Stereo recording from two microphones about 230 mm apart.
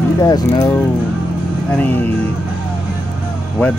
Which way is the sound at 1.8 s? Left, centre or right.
Centre.